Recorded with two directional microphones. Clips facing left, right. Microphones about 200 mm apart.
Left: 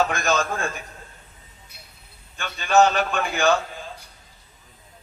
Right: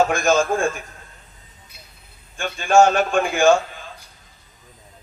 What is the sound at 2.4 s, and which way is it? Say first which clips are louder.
Speech: right 3 dB; 50° right (ahead or behind).